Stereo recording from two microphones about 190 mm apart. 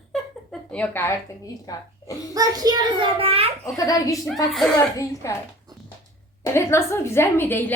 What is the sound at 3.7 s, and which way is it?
A woman's voice, 20° left (ahead or behind).